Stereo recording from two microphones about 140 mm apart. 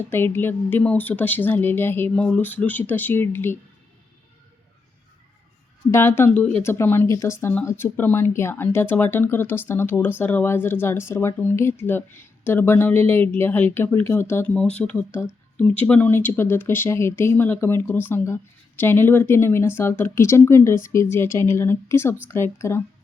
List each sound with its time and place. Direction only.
0.1 s speech: 15° left (ahead or behind)
5.9 s a woman's voice: 15° left (ahead or behind)